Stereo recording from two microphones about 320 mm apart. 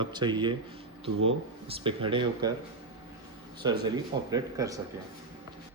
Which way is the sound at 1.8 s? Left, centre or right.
Centre.